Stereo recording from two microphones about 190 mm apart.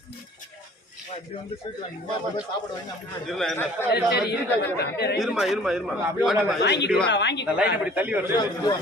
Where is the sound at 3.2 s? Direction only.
Centre (ahead or behind).